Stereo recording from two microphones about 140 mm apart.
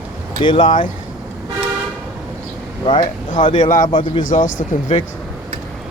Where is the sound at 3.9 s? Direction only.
35° left (ahead or behind).